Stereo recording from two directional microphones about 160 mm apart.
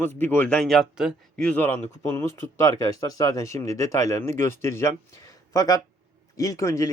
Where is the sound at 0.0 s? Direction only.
10° left (ahead or behind).